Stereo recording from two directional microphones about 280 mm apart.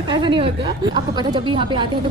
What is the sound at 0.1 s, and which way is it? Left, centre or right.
A man's voice, centre.